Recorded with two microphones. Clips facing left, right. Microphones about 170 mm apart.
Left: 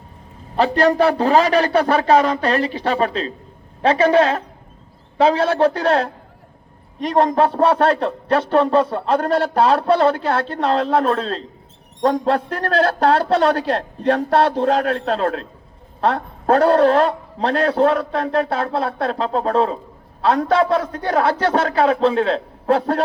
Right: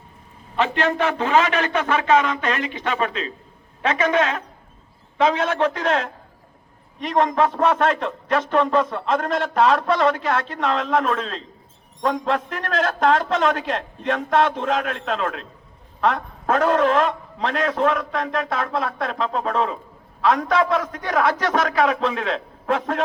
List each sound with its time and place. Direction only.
0.5 s a man's voice: 35° left (ahead or behind)